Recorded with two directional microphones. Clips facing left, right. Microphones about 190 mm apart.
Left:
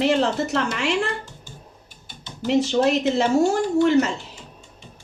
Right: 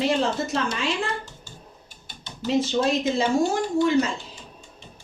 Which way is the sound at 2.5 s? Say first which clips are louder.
Left 3 dB; 70° left (ahead or behind).